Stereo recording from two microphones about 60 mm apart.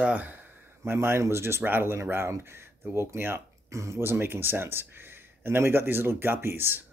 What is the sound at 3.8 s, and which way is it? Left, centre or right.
Speech, right.